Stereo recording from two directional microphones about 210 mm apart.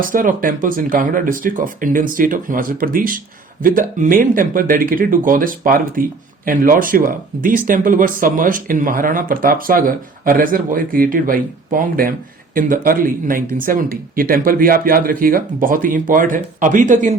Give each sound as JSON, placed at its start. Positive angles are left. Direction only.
{"t": 0.0, "sound": "speech", "side_deg": -40}